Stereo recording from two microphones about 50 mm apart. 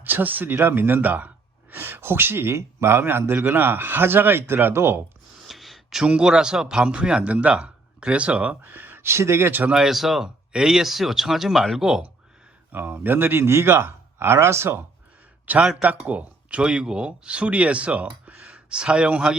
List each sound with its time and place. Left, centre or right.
0.0 s speech: right
5.4 s a sound: centre
6.0 s speech: centre
8.7 s a sound: right
9.0 s speech: right
9.7 s speech: centre
10.2 s speech: centre
12.7 s speech: right
15.5 s speech: right
18.3 s speech: centre